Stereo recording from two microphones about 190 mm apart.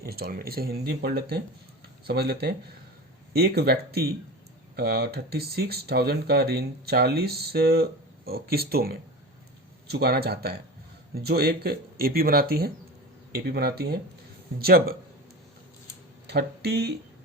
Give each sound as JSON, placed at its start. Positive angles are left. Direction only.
{"t": 0.1, "sound": "speech", "side_deg": -55}
{"t": 16.2, "sound": "speech", "side_deg": -60}